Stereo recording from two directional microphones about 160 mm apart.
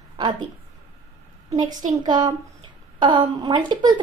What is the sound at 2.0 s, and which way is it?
A woman's voice, 25° right (ahead or behind).